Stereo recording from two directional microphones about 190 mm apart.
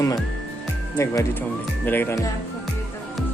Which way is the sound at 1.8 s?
10° left (ahead or behind).